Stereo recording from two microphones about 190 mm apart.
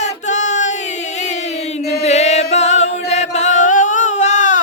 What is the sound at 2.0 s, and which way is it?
Chant, 35° left (ahead or behind).